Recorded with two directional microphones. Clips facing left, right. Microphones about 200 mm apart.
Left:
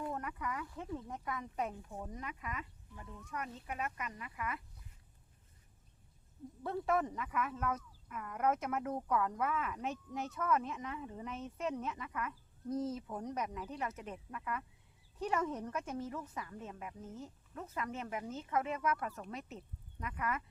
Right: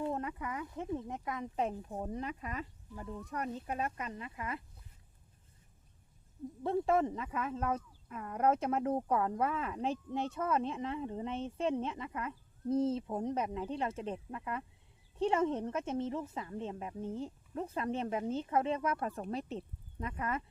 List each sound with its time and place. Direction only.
0.0 s speech: 25° right (ahead or behind)
6.6 s speech: 25° right (ahead or behind)